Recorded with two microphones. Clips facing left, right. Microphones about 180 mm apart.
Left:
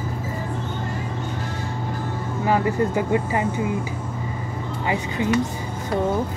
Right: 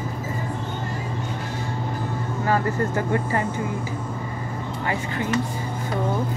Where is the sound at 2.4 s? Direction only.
15° left (ahead or behind).